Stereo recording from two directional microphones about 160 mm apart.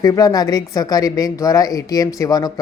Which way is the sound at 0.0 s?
20° left (ahead or behind).